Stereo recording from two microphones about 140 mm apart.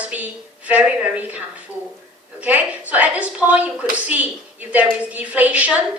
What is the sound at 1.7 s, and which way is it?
Speech, 20° left (ahead or behind).